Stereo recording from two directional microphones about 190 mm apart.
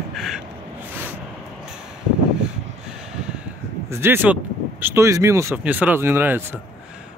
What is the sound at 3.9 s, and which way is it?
Speech, 10° right (ahead or behind).